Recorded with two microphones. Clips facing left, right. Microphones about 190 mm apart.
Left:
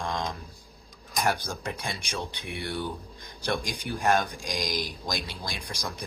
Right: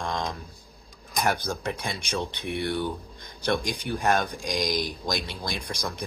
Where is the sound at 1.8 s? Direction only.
55° right (ahead or behind).